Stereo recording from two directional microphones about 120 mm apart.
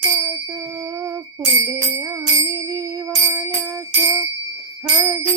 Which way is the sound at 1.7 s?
25° right (ahead or behind).